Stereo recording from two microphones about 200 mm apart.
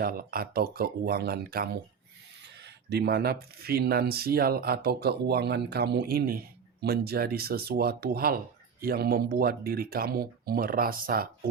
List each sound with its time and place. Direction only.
0.0 s speech: 45° right (ahead or behind)